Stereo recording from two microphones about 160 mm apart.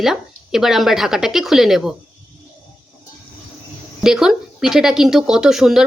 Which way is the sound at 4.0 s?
5° right (ahead or behind).